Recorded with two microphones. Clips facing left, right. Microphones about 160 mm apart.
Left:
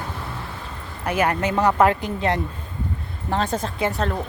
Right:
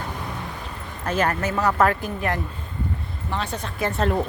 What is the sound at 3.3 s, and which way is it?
Speech, 45° left (ahead or behind).